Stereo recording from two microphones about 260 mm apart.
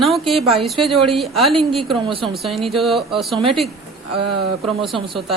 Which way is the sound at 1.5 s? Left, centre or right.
Right.